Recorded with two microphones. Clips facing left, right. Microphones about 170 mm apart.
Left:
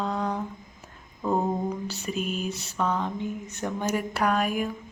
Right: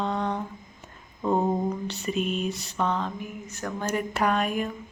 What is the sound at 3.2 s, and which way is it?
Speech, 20° left (ahead or behind).